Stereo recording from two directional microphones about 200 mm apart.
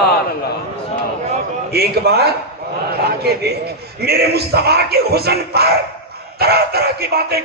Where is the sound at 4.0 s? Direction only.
50° right (ahead or behind).